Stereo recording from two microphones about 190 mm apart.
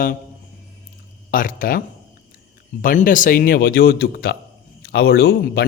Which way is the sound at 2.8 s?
45° left (ahead or behind).